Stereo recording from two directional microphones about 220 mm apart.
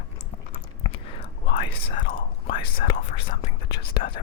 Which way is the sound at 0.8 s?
25° left (ahead or behind).